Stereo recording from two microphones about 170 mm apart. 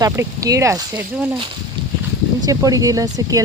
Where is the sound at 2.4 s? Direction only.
20° right (ahead or behind).